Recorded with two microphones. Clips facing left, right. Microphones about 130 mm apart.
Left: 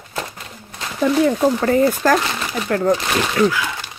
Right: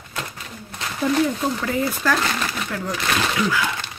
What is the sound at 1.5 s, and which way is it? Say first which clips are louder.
Speech: left 8 dB; 45° left (ahead or behind).